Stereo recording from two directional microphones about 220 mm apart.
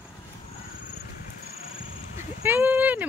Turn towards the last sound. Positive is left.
turn(degrees=-5)  # may be behind; listen again after turning